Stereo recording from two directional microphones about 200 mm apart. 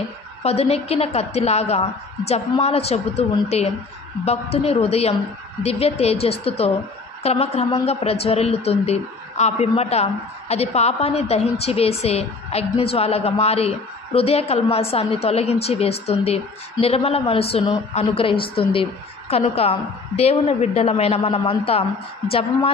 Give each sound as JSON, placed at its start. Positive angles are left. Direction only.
{"t": 0.4, "sound": "a woman's voice", "side_deg": 30}